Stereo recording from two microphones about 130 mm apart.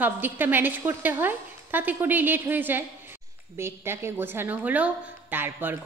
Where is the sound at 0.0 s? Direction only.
15° right (ahead or behind).